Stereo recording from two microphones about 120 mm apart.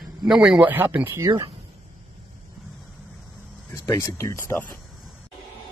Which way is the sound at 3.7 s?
25° left (ahead or behind).